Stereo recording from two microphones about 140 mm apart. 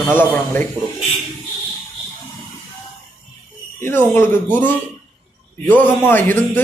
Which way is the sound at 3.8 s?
15° left (ahead or behind).